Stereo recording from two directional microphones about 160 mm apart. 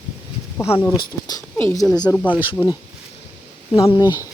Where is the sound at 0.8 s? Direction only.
20° left (ahead or behind).